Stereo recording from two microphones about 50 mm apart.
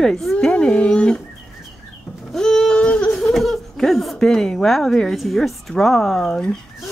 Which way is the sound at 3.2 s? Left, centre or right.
Centre.